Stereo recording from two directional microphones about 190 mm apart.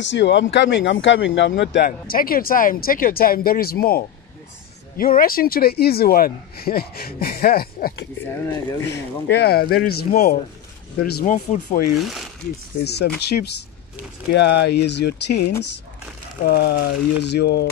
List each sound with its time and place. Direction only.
0.0 s speech: 70° left (ahead or behind)
1.9 s a man's voice: 50° left (ahead or behind)
8.6 s speech: 15° left (ahead or behind)
9.3 s a man's voice: 55° left (ahead or behind)
11.3 s speech: 40° left (ahead or behind)
12.0 s speech: centre (ahead or behind)
12.8 s speech: 60° left (ahead or behind)